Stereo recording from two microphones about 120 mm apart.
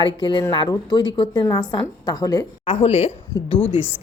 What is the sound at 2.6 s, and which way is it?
Speech, 65° left (ahead or behind).